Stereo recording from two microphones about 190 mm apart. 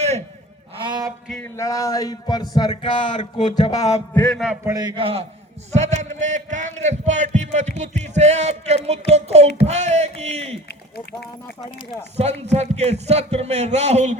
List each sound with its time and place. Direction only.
0.8 s a man's voice: 20° right (ahead or behind)
1.5 s speech: 15° left (ahead or behind)
4.1 s a man's voice: 5° left (ahead or behind)
4.6 s a man's voice: 20° right (ahead or behind)
10.7 s speech: 55° left (ahead or behind)
12.1 s a man's voice: 35° right (ahead or behind)